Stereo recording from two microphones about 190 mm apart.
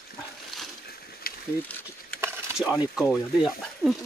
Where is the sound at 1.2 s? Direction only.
50° left (ahead or behind).